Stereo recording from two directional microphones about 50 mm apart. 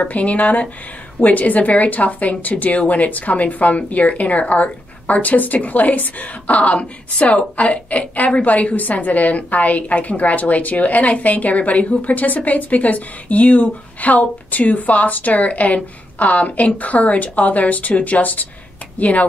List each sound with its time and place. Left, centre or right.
0.0 s speech: left